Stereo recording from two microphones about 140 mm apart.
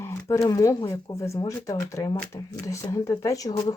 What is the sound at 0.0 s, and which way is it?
Speech, 20° left (ahead or behind).